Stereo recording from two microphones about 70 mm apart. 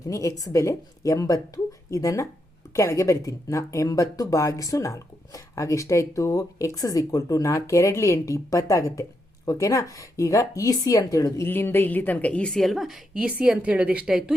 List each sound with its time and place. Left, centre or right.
0.1 s speech: left
11.4 s a woman's voice: left
12.5 s a woman's voice: centre